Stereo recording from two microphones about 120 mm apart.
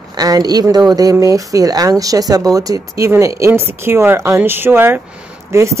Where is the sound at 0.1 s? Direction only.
35° right (ahead or behind).